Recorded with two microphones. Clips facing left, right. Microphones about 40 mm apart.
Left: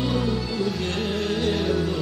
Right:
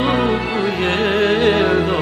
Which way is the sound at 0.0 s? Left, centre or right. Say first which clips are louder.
Right 8 dB; right.